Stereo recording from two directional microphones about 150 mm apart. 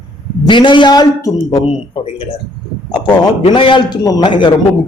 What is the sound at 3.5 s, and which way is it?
A man's voice, 35° left (ahead or behind).